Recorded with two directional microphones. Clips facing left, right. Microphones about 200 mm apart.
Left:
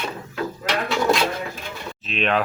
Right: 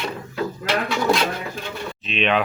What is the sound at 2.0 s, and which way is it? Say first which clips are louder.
Speech: right 1 dB; centre (ahead or behind).